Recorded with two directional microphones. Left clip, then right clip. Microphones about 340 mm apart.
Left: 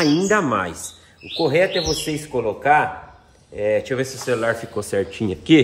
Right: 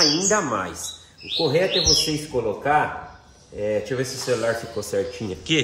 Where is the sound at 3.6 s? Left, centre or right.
Centre.